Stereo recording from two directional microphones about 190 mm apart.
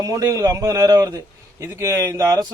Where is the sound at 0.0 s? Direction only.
15° right (ahead or behind).